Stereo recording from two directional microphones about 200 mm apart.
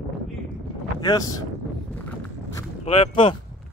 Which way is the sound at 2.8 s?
25° left (ahead or behind).